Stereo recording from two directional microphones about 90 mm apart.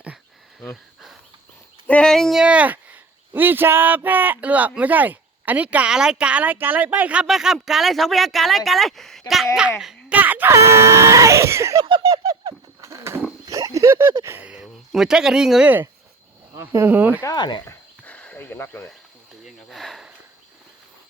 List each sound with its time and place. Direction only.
1.9 s speech: 10° left (ahead or behind)
2.4 s speech: 15° right (ahead or behind)
7.3 s speech: 5° right (ahead or behind)
10.1 s a sound: 20° right (ahead or behind)
10.5 s screaming: 30° right (ahead or behind)
11.8 s a sound: 55° right (ahead or behind); by 13.2 s 30° right (ahead or behind)
13.4 s oink: 45° right (ahead or behind)
13.7 s screaming: 35° right (ahead or behind)
14.3 s speech: 25° right (ahead or behind)
14.5 s speech: 5° right (ahead or behind)
16.6 s speech: 25° right (ahead or behind)
17.3 s speech: 55° left (ahead or behind)
18.0 s cricket: 15° left (ahead or behind)
19.5 s a sound: centre (ahead or behind)